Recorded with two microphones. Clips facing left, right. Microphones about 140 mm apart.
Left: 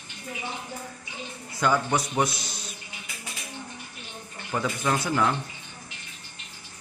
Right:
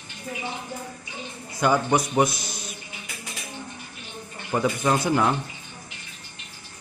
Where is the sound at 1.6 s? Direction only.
15° right (ahead or behind).